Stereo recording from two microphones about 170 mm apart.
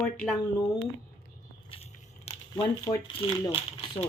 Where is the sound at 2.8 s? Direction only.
20° left (ahead or behind).